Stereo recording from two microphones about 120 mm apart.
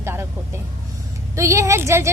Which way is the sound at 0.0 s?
20° right (ahead or behind).